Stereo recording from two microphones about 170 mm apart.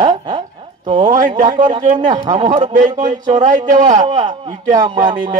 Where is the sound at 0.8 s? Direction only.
25° right (ahead or behind).